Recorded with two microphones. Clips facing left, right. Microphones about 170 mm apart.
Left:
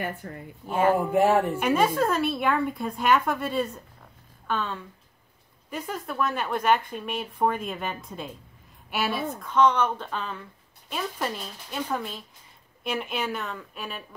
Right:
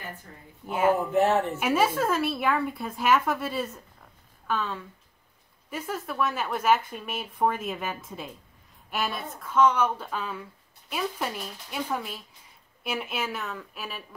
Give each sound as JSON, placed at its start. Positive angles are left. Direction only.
{"t": 0.0, "sound": "a woman's voice", "side_deg": 70}
{"t": 0.7, "sound": "a woman's voice", "side_deg": -10}
{"t": 1.1, "sound": "speech", "side_deg": 10}
{"t": 1.6, "sound": "a woman's voice", "side_deg": -5}